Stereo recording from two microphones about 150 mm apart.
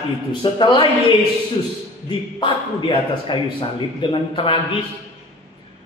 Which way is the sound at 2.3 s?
35° left (ahead or behind).